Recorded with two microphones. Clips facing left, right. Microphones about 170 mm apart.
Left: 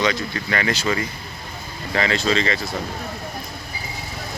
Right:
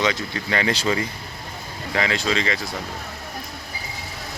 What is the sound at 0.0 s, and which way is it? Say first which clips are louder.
Speech: left 1 dB; 20° right (ahead or behind).